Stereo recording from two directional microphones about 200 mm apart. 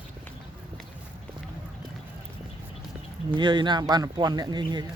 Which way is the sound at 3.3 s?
25° right (ahead or behind).